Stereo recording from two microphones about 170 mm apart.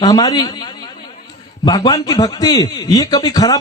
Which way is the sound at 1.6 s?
25° left (ahead or behind).